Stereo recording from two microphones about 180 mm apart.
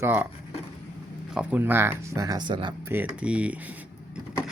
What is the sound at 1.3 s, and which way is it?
Speech, 5° right (ahead or behind).